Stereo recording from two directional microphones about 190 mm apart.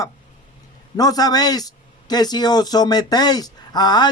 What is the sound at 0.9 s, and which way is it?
Speech, 20° left (ahead or behind).